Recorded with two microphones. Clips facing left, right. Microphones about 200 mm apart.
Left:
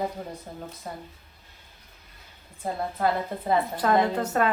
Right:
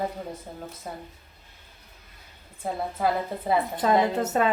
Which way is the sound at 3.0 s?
5° right (ahead or behind).